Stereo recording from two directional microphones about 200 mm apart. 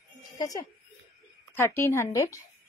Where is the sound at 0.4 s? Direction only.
15° left (ahead or behind).